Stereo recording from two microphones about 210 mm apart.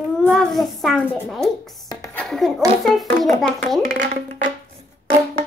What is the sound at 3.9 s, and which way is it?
Speech, 35° right (ahead or behind).